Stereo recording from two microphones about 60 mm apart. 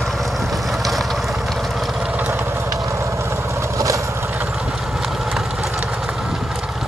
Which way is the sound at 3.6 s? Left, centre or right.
Right.